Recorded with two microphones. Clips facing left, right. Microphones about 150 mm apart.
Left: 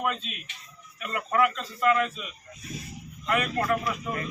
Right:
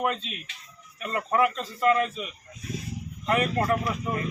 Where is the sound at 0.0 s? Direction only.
30° right (ahead or behind).